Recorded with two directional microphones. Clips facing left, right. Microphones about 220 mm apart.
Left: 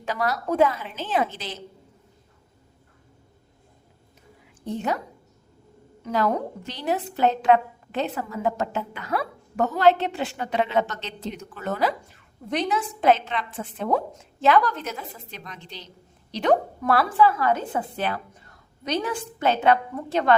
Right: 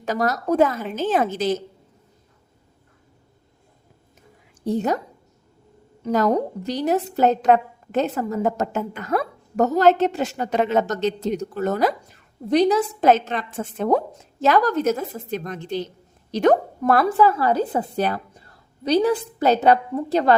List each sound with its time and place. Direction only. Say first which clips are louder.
0.0 s a woman's voice: right 4 dB; 45° right (ahead or behind)
4.6 s a woman's voice: right 5 dB; 40° right (ahead or behind)
6.0 s a woman's voice: right 5 dB; 40° right (ahead or behind)